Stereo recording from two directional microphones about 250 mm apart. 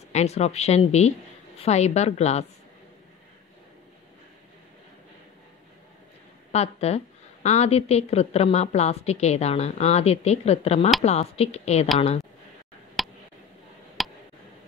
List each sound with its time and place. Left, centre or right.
0.1 s a woman's voice: left
6.5 s a woman's voice: left
13.0 s a sound: centre
14.0 s tick: centre